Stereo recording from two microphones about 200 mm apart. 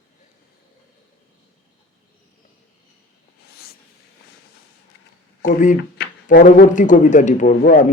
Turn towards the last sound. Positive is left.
turn(degrees=40)  # may be behind; listen again after turning